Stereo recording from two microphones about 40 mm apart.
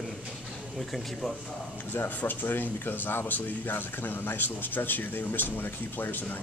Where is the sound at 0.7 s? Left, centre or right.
Centre.